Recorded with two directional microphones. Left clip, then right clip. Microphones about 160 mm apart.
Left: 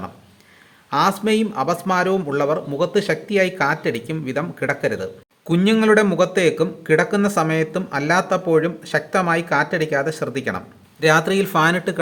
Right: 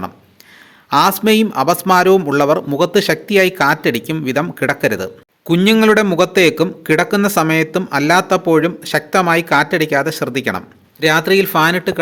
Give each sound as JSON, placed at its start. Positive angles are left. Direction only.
{"t": 0.9, "sound": "a man's voice", "side_deg": -30}
{"t": 11.0, "sound": "speech", "side_deg": -15}